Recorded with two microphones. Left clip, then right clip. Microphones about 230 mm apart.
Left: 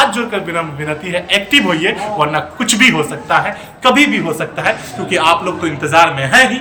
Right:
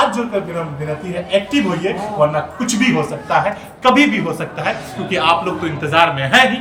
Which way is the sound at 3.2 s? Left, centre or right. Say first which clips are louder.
Left 2 dB; centre.